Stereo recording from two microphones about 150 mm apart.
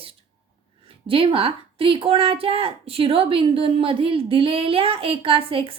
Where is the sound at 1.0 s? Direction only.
35° right (ahead or behind).